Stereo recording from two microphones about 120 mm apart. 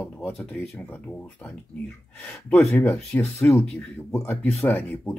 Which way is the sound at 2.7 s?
20° left (ahead or behind).